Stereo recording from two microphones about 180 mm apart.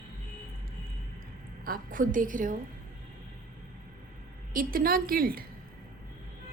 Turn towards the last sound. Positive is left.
turn(degrees=-55)  # may be behind; listen again after turning